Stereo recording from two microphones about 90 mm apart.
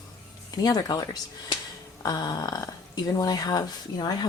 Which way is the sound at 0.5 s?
50° left (ahead or behind).